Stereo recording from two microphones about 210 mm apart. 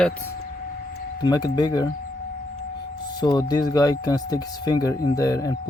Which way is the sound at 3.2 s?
20° left (ahead or behind).